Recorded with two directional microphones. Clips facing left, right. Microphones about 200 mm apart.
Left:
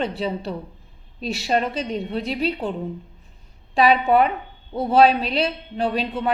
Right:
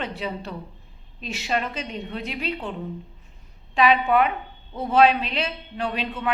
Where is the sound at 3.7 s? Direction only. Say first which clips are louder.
Left 3 dB; 35° left (ahead or behind).